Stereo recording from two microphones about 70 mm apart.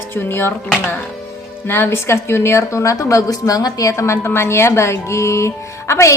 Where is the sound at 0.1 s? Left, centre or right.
Left.